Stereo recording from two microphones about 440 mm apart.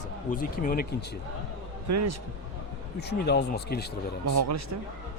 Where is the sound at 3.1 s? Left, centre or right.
Left.